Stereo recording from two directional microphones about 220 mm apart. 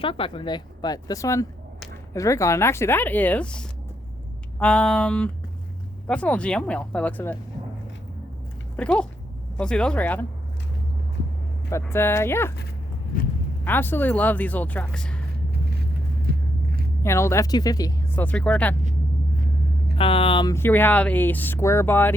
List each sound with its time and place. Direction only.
0.0 s speech: 25° left (ahead or behind); by 7.3 s 5° left (ahead or behind)
8.7 s speech: 5° left (ahead or behind)
11.7 s speech: 10° left (ahead or behind)
13.7 s speech: 10° left (ahead or behind)
17.0 s speech: 10° left (ahead or behind)
20.0 s speech: 25° left (ahead or behind); by 22.1 s 10° left (ahead or behind)